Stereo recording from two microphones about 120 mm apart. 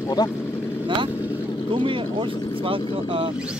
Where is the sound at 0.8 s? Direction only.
45° right (ahead or behind).